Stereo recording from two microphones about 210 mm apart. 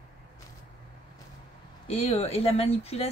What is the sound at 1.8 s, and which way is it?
A woman's voice, 30° left (ahead or behind).